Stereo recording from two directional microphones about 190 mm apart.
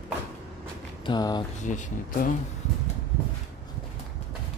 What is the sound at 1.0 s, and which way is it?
Speech, 20° left (ahead or behind).